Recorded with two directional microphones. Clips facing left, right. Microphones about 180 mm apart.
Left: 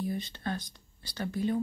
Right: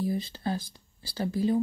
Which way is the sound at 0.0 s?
30° right (ahead or behind).